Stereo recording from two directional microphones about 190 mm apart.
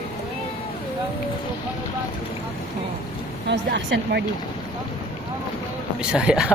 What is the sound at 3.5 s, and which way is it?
Speech, 65° right (ahead or behind).